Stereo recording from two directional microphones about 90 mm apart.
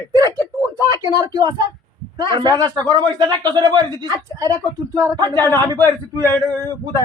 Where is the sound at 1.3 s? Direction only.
50° right (ahead or behind).